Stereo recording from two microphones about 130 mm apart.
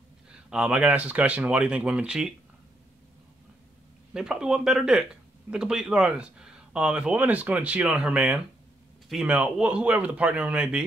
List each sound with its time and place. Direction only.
0.3 s speech: 5° right (ahead or behind)
4.1 s speech: 5° right (ahead or behind)